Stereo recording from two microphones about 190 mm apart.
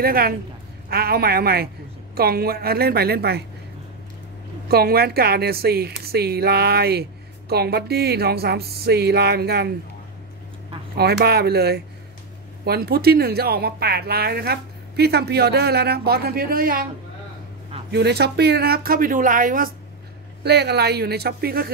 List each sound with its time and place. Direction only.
0.0 s speech: 50° right (ahead or behind)
4.6 s speech: 55° right (ahead or behind)
11.0 s speech: 55° right (ahead or behind)
17.9 s speech: 60° right (ahead or behind)
20.4 s speech: 60° right (ahead or behind)